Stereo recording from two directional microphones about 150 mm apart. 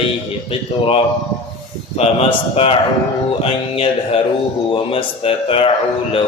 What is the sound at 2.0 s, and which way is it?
Mantra, 40° left (ahead or behind).